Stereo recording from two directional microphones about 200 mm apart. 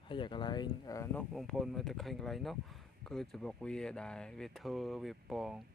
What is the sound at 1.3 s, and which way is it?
Speech, centre (ahead or behind).